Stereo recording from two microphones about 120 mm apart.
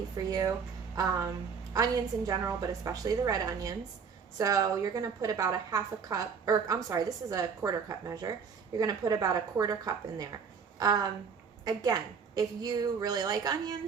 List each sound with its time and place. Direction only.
0.3 s a woman's voice: 30° right (ahead or behind)